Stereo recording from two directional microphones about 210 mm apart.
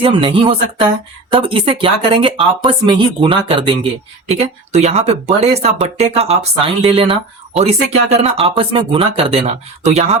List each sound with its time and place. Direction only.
0.0 s speech: 25° right (ahead or behind)